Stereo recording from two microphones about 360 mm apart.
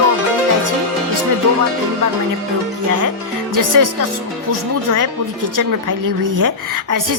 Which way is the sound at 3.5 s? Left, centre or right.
Right.